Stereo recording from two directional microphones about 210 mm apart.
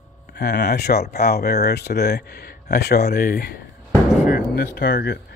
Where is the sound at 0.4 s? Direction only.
45° left (ahead or behind).